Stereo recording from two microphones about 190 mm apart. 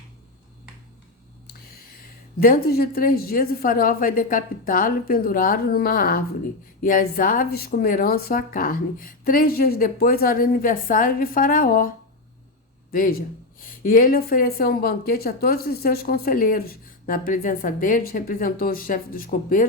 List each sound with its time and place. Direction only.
2.4 s speech: 50° left (ahead or behind)